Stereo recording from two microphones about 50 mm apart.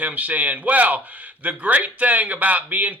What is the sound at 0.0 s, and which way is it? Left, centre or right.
A man's voice, right.